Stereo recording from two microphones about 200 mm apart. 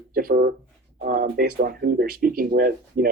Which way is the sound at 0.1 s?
45° right (ahead or behind).